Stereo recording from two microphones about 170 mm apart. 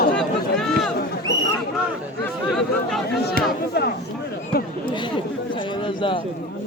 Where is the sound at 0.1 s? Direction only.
5° left (ahead or behind).